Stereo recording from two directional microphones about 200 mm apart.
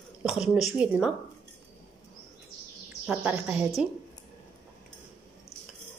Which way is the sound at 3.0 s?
10° right (ahead or behind).